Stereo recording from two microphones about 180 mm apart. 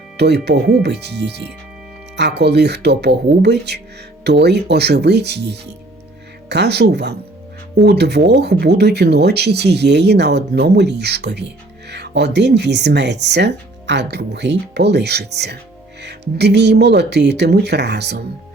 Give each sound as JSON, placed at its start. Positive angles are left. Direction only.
{"t": 0.2, "sound": "speech", "side_deg": -65}